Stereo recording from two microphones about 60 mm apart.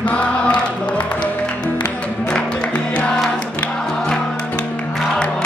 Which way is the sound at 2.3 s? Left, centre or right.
Centre.